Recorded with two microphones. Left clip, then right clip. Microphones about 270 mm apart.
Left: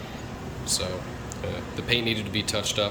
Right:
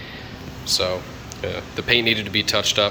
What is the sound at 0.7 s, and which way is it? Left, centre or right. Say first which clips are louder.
Speech: right 8 dB; centre.